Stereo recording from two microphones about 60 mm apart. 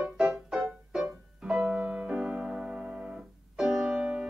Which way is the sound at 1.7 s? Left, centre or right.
Right.